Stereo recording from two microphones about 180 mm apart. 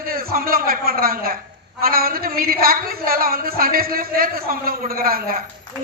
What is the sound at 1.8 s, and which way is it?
A woman's voice, 55° right (ahead or behind).